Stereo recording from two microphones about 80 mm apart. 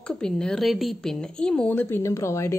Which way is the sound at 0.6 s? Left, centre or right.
Centre.